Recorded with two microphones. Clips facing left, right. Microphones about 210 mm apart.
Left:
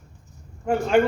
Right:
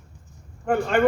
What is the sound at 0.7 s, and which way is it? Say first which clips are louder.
Speech: left 2 dB; 55° right (ahead or behind).